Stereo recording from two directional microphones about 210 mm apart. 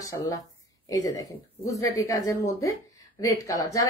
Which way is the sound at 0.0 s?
15° left (ahead or behind).